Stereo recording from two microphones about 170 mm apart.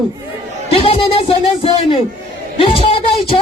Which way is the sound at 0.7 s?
35° left (ahead or behind).